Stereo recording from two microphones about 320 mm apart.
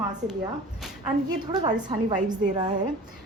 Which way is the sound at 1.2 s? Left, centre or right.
Centre.